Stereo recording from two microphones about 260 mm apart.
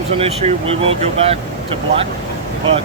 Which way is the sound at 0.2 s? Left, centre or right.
Right.